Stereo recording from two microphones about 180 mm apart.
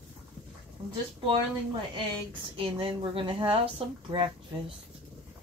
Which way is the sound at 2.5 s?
30° right (ahead or behind).